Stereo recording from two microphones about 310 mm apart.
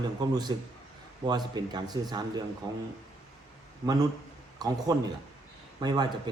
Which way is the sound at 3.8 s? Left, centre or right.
Centre.